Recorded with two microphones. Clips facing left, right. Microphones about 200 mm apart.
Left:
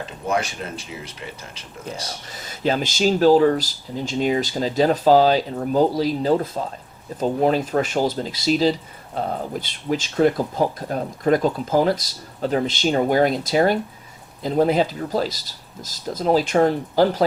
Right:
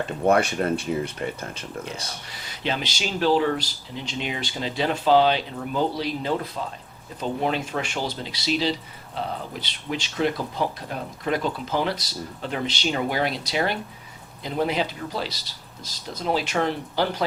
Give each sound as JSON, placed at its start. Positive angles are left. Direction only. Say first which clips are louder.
{"t": 0.3, "sound": "speech", "louder": "right 5 dB", "side_deg": -60}
{"t": 2.3, "sound": "speech", "louder": "left 7 dB", "side_deg": 45}